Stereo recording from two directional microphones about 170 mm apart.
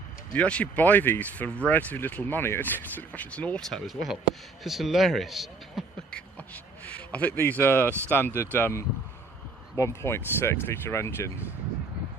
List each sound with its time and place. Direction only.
0.3 s speech: 5° left (ahead or behind)